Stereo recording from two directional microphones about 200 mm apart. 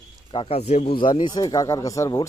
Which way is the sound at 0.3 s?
30° left (ahead or behind).